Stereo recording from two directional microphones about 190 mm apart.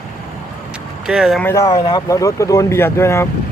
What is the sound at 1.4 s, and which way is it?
Speech, 15° left (ahead or behind).